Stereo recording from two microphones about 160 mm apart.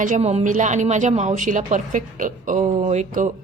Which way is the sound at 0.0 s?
50° right (ahead or behind).